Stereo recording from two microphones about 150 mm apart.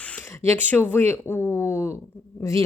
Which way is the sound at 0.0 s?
10° left (ahead or behind).